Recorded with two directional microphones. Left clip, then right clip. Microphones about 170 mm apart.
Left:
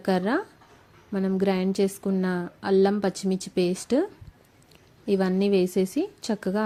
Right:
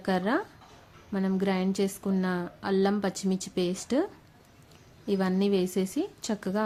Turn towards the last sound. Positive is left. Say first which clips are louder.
# left 3 dB
turn(degrees=20)  # may be behind; listen again after turning